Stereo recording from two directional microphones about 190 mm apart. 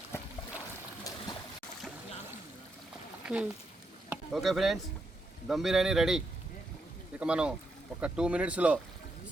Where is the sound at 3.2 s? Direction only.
5° right (ahead or behind).